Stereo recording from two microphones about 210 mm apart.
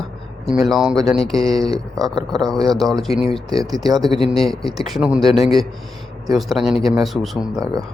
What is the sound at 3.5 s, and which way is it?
Speech, 15° right (ahead or behind).